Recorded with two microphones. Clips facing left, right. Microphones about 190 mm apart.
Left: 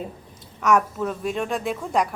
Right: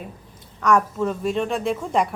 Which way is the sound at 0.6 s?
5° left (ahead or behind).